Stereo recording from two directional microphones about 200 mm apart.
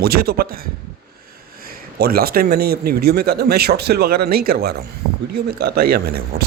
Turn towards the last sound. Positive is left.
turn(degrees=-50)  # may be behind; listen again after turning